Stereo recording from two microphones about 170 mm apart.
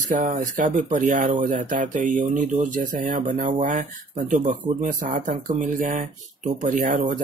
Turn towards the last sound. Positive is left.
turn(degrees=-50)  # may be behind; listen again after turning